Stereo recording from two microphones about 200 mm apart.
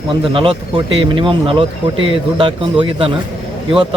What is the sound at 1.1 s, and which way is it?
A man's voice, 25° right (ahead or behind).